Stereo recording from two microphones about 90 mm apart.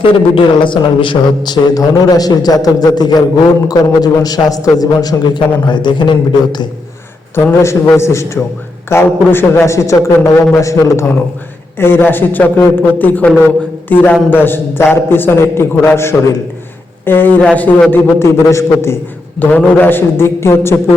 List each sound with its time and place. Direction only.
0.0 s a man's voice: 70° left (ahead or behind)
1.7 s a man's voice: 40° left (ahead or behind)
7.3 s a man's voice: 30° left (ahead or behind)
11.8 s a man's voice: 25° left (ahead or behind)
17.9 s a man's voice: 30° left (ahead or behind)
19.4 s a man's voice: 20° left (ahead or behind)